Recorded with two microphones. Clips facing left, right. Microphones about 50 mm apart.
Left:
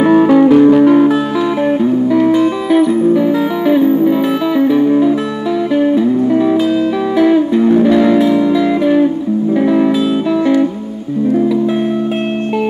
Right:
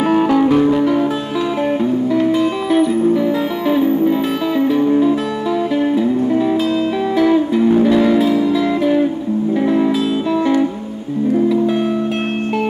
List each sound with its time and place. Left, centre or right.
0.6 s music: centre
2.7 s music: centre
8.3 s music: centre